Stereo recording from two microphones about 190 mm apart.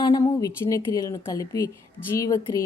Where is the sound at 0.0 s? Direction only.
20° left (ahead or behind).